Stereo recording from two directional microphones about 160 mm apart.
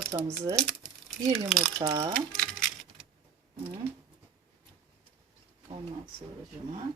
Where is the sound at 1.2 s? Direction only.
20° right (ahead or behind).